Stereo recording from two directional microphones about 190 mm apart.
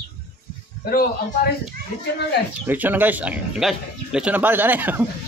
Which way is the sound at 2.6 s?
10° right (ahead or behind).